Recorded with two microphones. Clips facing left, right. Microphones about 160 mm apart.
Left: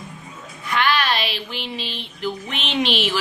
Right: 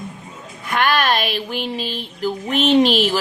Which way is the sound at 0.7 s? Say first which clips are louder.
Right 3 dB; 50° right (ahead or behind).